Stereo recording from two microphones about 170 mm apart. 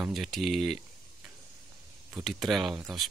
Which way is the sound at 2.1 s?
Centre (ahead or behind).